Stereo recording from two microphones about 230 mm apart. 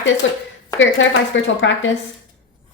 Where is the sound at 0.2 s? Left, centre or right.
Left.